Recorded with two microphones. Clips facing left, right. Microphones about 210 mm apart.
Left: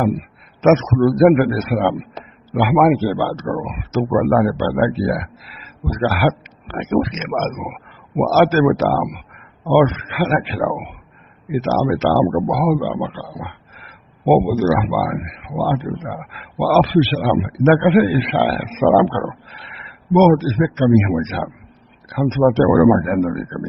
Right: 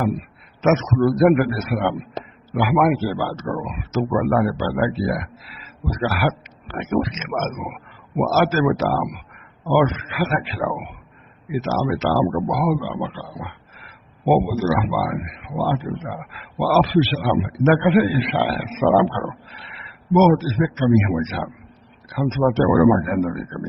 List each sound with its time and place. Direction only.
0.6 s a man's voice: 50° left (ahead or behind)
6.0 s a man's voice: 50° left (ahead or behind)